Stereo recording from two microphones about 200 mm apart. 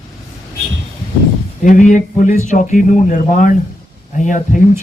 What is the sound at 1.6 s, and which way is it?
A man's voice, 40° left (ahead or behind).